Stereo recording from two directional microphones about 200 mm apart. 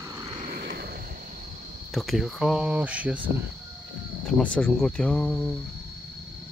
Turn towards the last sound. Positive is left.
turn(degrees=5)  # may be behind; listen again after turning